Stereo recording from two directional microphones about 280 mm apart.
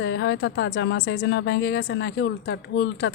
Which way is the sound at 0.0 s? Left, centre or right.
Left.